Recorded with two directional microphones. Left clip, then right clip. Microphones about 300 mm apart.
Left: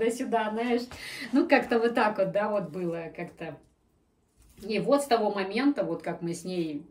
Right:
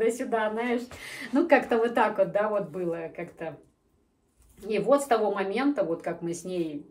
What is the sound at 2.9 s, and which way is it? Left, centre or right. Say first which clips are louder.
Speech: right 2 dB; centre.